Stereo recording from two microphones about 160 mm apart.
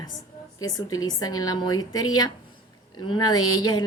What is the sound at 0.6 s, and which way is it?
A woman's voice, 25° left (ahead or behind).